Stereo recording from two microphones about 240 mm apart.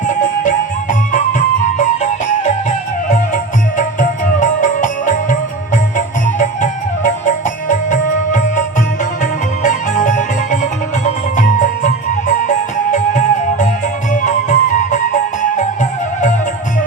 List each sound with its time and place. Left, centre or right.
0.1 s music: left